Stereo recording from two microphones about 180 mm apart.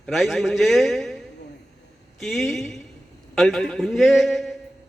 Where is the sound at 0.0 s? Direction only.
Centre (ahead or behind).